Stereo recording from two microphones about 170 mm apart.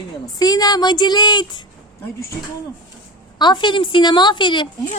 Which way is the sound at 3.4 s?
25° left (ahead or behind).